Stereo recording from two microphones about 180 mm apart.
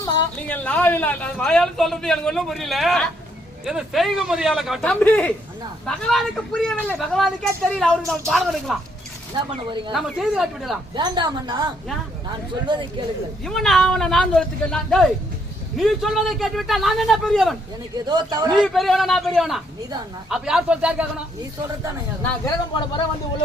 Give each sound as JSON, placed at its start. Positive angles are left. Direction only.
{"t": 0.0, "sound": "speech", "side_deg": 10}
{"t": 9.3, "sound": "a woman's voice", "side_deg": -25}
{"t": 9.9, "sound": "speech", "side_deg": 0}
{"t": 10.9, "sound": "a woman's voice", "side_deg": -25}
{"t": 13.4, "sound": "speech", "side_deg": 0}
{"t": 17.9, "sound": "a woman's voice", "side_deg": -25}
{"t": 18.6, "sound": "speech", "side_deg": 0}
{"t": 22.2, "sound": "speech", "side_deg": 10}